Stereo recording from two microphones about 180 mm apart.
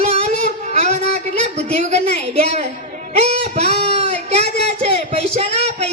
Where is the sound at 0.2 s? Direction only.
40° right (ahead or behind).